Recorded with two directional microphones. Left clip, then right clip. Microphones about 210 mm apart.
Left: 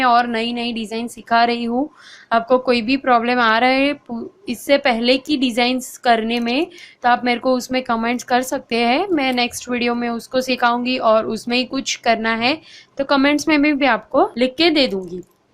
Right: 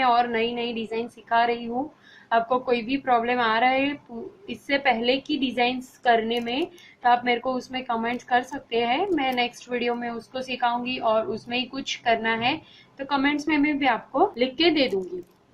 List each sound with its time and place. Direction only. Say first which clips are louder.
0.0 s a woman's voice: left 5 dB; 50° left (ahead or behind)